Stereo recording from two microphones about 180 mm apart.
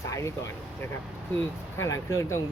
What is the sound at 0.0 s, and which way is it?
Speech, 15° left (ahead or behind).